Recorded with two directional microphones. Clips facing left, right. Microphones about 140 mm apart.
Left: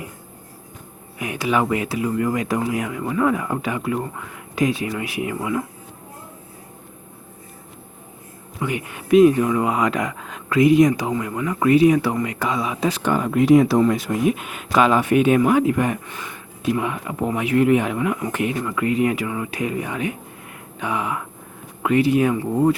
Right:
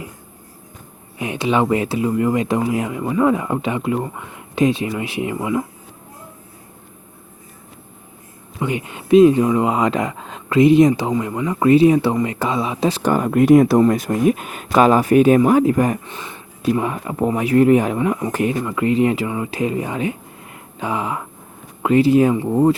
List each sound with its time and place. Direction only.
1.2 s speech: 25° right (ahead or behind)
8.5 s speech: 25° right (ahead or behind)